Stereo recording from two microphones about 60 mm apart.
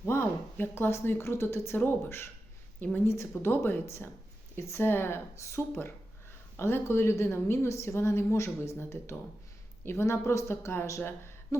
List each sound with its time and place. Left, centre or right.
0.0 s a woman's voice: left